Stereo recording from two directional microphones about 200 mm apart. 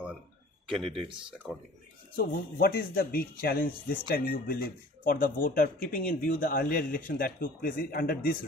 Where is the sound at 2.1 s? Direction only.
45° left (ahead or behind).